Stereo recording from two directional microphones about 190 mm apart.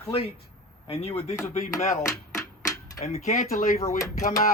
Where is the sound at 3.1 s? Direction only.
40° left (ahead or behind).